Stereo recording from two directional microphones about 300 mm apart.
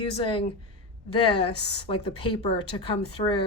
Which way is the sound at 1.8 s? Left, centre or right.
Centre.